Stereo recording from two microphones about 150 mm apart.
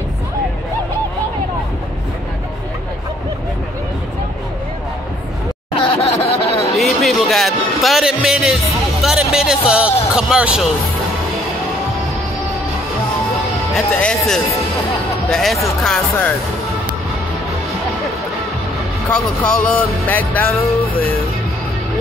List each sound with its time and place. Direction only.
5.8 s laughter: 35° left (ahead or behind)
6.8 s music: centre (ahead or behind)
9.0 s a sound: 5° right (ahead or behind)
9.5 s speech: 5° right (ahead or behind)
13.7 s speech: 5° left (ahead or behind)
19.1 s music: 5° left (ahead or behind)